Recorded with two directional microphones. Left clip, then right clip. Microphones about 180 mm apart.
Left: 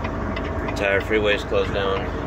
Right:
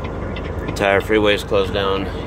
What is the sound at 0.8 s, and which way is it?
Speech, 45° right (ahead or behind).